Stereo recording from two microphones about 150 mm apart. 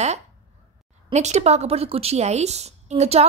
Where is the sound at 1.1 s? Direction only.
50° right (ahead or behind).